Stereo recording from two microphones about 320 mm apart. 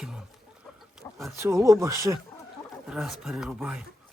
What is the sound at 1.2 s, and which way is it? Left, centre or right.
Speech, centre.